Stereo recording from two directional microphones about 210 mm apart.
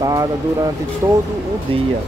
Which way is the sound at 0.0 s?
15° right (ahead or behind).